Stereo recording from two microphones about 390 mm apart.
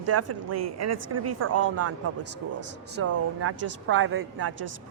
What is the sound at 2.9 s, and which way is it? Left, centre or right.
A woman's voice, right.